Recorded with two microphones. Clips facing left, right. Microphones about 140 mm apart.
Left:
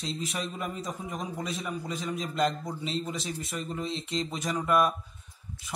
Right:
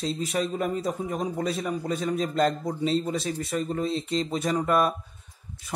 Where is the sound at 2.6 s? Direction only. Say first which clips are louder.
Right 8 dB; 30° right (ahead or behind).